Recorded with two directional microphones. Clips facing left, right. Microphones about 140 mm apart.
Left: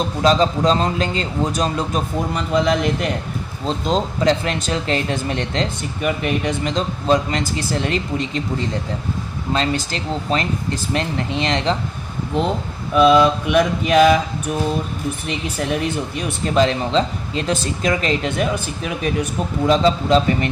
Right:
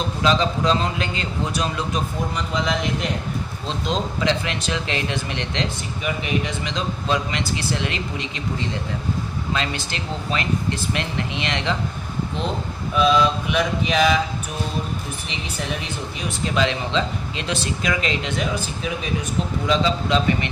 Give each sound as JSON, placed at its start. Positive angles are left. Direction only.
{"t": 0.2, "sound": "a man's voice", "side_deg": 40}
{"t": 3.8, "sound": "speech", "side_deg": 45}
{"t": 9.5, "sound": "a man's voice", "side_deg": 35}
{"t": 12.9, "sound": "speech", "side_deg": 60}
{"t": 16.6, "sound": "speech", "side_deg": 40}